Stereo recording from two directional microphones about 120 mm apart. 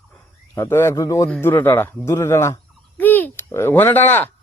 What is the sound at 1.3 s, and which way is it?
A woman's voice, 20° left (ahead or behind).